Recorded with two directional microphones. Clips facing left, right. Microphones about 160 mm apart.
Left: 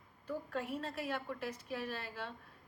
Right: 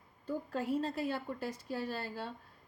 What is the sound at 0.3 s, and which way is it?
A woman's voice, 30° right (ahead or behind).